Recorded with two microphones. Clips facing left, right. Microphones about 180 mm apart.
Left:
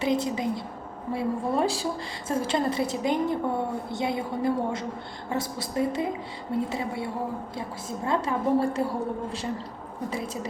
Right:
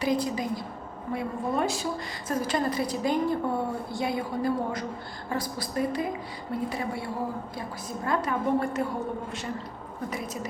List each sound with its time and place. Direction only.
0.0 s a woman's voice: 25° left (ahead or behind)